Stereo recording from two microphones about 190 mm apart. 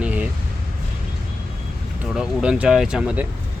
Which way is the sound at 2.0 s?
5° right (ahead or behind).